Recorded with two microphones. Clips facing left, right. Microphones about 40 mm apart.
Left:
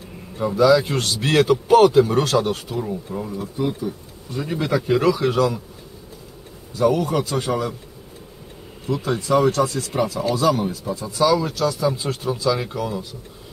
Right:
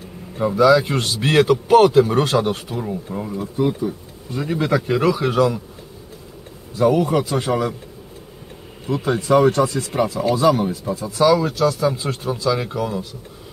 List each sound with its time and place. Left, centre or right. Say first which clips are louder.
0.4 s a man's voice: right 2 dB; centre
6.8 s a man's voice: right 2 dB; centre
8.8 s a man's voice: right 3 dB; centre